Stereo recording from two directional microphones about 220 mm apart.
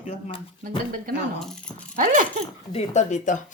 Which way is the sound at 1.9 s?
35° right (ahead or behind).